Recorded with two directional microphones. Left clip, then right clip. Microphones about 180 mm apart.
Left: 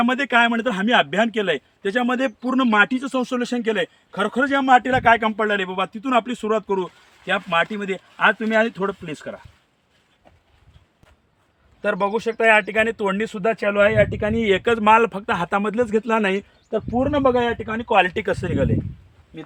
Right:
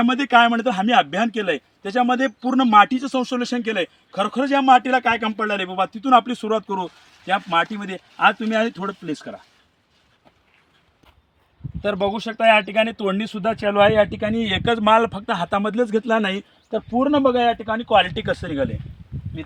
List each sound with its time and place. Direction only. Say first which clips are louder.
0.2 s a man's voice: right 2 dB; 25° left (ahead or behind)
8.1 s a man's voice: even; 30° left (ahead or behind)
11.8 s speech: left 1 dB; 20° left (ahead or behind)
17.1 s speech: right 1 dB; 15° left (ahead or behind)
17.7 s speech: right 1 dB; 35° left (ahead or behind); by 18.7 s 55° left (ahead or behind)